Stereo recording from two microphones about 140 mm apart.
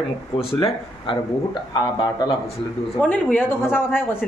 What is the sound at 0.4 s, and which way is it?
A man's voice, 40° left (ahead or behind).